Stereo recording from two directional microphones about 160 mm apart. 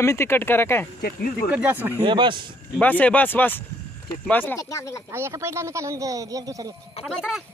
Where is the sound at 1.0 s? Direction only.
65° left (ahead or behind).